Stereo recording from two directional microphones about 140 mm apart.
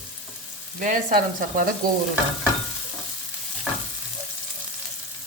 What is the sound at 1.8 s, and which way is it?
Frying, 90° right.